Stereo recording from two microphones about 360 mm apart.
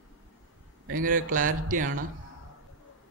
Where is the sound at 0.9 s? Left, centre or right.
Right.